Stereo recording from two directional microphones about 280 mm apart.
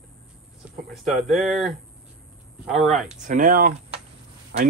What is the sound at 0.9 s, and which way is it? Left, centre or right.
Speech, centre.